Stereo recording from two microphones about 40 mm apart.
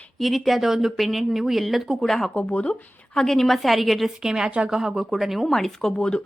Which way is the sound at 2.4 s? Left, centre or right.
Left.